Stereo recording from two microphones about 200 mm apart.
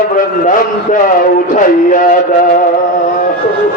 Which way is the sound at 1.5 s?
45° left (ahead or behind).